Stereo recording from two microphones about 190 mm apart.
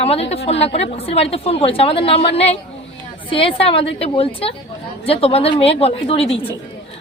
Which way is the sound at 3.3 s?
30° left (ahead or behind).